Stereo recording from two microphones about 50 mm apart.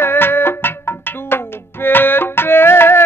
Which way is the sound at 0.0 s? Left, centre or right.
Left.